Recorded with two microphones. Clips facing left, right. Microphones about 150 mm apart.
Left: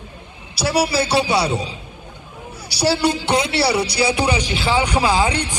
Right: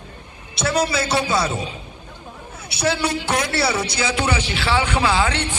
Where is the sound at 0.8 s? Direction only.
30° left (ahead or behind).